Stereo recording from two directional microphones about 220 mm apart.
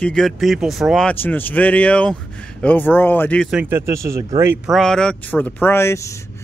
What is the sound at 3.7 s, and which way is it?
Speech, 15° right (ahead or behind).